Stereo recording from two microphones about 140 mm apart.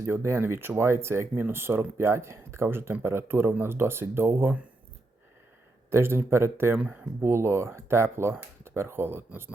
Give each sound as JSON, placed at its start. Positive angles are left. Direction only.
{"t": 0.0, "sound": "speech", "side_deg": -20}
{"t": 5.9, "sound": "speech", "side_deg": -15}